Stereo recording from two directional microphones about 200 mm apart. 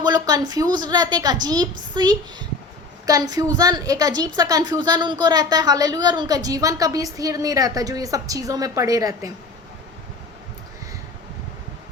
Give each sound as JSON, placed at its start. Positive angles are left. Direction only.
{"t": 0.0, "sound": "a woman's voice", "side_deg": -20}